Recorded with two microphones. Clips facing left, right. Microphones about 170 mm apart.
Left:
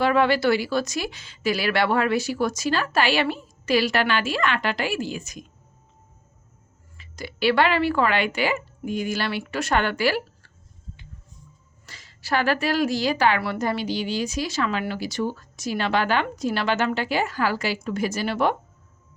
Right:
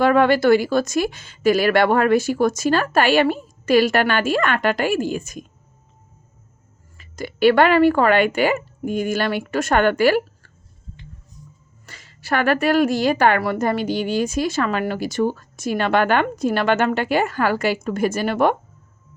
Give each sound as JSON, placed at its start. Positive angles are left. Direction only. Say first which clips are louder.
{"t": 0.0, "sound": "a woman's voice", "louder": "right 5 dB", "side_deg": -50}
{"t": 6.9, "sound": "a woman's voice", "louder": "right 6 dB", "side_deg": -50}
{"t": 11.9, "sound": "a woman's voice", "louder": "right 3 dB", "side_deg": -55}